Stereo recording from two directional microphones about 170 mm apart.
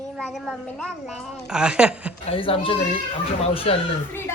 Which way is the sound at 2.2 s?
35° left (ahead or behind).